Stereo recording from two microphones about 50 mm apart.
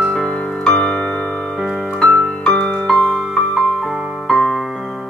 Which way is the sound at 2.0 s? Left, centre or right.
Centre.